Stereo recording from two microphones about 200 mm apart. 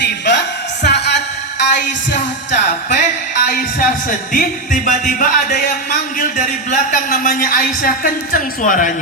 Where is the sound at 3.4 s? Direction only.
45° left (ahead or behind).